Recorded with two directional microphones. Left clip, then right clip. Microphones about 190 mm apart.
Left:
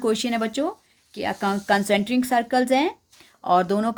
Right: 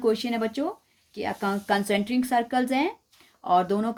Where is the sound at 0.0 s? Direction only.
40° left (ahead or behind).